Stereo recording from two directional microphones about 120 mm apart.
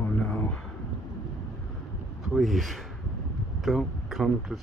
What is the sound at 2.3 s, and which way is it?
Speech, centre (ahead or behind).